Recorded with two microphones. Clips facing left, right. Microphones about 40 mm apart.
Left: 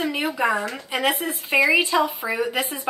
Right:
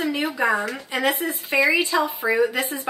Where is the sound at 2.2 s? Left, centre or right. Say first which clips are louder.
Right 5 dB; centre.